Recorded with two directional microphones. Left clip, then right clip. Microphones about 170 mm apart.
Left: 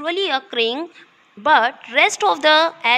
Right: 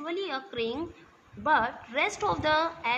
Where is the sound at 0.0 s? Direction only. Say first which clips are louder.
Left 12 dB; 30° left (ahead or behind).